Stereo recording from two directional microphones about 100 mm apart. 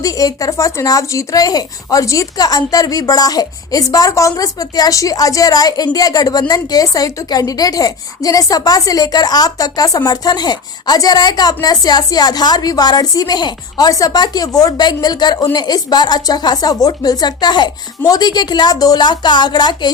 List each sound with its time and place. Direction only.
0.0 s speech: 35° left (ahead or behind)